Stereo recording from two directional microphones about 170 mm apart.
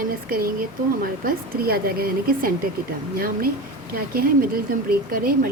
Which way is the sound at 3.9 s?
60° right (ahead or behind).